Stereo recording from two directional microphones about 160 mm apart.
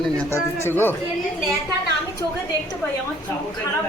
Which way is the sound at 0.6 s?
15° left (ahead or behind).